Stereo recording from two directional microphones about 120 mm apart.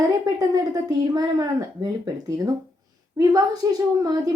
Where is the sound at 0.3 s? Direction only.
30° right (ahead or behind).